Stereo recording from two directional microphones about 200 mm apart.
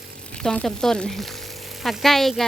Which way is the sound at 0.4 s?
5° left (ahead or behind).